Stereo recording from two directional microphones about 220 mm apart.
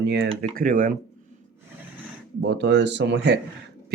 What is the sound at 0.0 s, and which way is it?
Speech, 50° right (ahead or behind).